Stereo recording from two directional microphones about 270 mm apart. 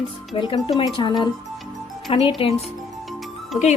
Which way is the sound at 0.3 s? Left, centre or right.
Centre.